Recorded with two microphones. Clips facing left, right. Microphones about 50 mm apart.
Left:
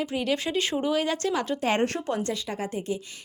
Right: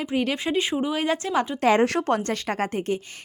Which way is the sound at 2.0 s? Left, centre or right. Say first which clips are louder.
Right 5 dB; right.